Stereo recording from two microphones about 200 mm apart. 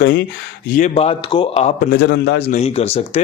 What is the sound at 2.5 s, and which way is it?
Speech, 35° left (ahead or behind).